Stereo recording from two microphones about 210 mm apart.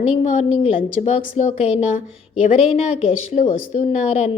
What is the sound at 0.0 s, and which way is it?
A woman's voice, 30° left (ahead or behind).